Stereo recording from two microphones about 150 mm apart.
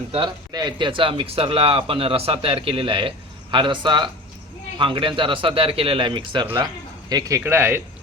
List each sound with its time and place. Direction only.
0.1 s speech: 30° right (ahead or behind); by 7.8 s 15° right (ahead or behind)